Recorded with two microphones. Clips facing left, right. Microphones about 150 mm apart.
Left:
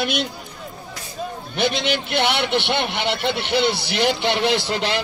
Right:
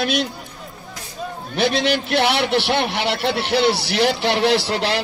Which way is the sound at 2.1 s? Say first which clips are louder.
Right 2 dB; centre (ahead or behind).